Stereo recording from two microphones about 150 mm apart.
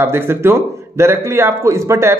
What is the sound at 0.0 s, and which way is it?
Speech, 15° right (ahead or behind).